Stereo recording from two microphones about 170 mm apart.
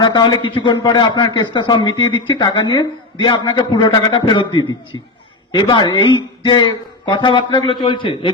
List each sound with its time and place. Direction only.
0.0 s a man's voice: 25° left (ahead or behind)